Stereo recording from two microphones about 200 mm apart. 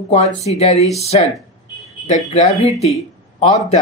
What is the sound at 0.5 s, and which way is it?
Speech, 35° left (ahead or behind).